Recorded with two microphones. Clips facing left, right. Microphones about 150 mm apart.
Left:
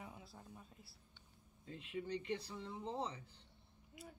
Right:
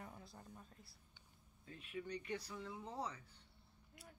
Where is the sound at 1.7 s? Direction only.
25° left (ahead or behind).